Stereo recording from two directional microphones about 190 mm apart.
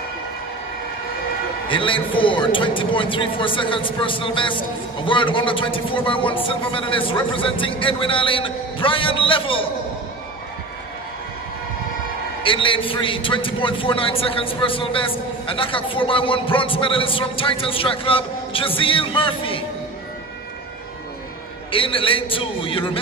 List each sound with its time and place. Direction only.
1.7 s a man's voice: 25° left (ahead or behind)
12.4 s a man's voice: 25° left (ahead or behind)
21.7 s a man's voice: 30° left (ahead or behind)